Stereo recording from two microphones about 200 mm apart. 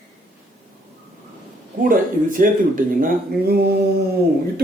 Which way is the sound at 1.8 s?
40° right (ahead or behind).